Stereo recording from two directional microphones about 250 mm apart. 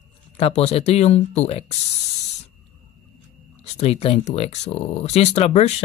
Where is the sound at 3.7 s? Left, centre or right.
Left.